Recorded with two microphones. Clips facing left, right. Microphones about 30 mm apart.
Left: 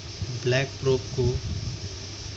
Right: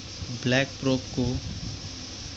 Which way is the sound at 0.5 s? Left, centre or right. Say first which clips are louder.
Left 1 dB; right.